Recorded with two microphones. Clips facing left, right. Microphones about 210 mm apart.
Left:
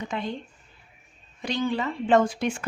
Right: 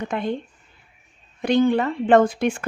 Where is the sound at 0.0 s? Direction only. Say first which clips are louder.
Right 6 dB; 55° right (ahead or behind).